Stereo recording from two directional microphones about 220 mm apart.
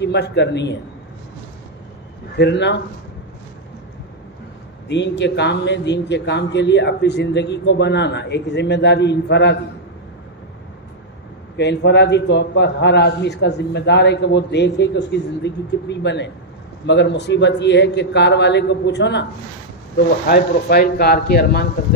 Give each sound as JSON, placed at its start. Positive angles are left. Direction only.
{"t": 0.0, "sound": "a man's voice", "side_deg": 50}
{"t": 2.3, "sound": "a man's voice", "side_deg": 50}
{"t": 4.8, "sound": "a man's voice", "side_deg": 55}
{"t": 11.5, "sound": "a man's voice", "side_deg": 50}
{"t": 20.2, "sound": "a man's voice", "side_deg": 45}